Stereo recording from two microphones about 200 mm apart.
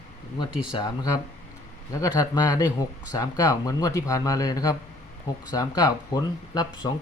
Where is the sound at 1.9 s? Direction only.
15° left (ahead or behind).